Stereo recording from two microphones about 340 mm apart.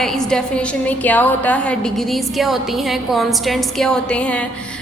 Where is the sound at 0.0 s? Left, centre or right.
Centre.